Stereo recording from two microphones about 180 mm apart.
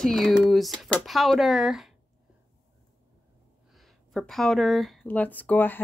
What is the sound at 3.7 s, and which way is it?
Speech, centre (ahead or behind).